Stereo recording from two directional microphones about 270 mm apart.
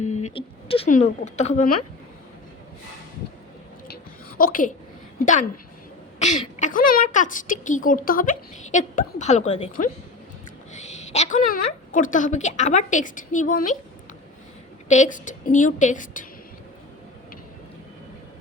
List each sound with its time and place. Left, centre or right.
0.0 s a woman's voice: left
4.4 s a woman's voice: left
14.8 s a woman's voice: left